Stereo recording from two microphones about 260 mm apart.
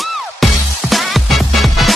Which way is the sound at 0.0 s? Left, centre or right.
Centre.